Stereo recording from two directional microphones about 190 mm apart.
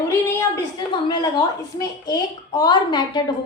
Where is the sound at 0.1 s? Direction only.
15° left (ahead or behind).